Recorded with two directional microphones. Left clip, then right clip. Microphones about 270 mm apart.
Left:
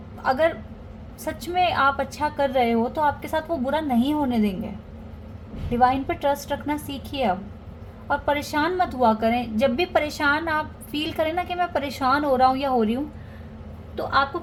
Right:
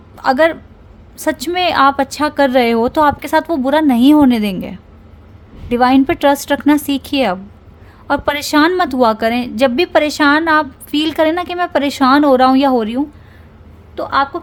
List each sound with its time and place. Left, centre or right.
0.2 s a woman's voice: right
5.7 s a woman's voice: right